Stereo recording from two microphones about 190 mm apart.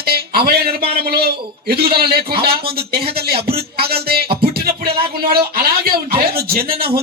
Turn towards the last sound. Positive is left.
turn(degrees=-55)  # may be behind; listen again after turning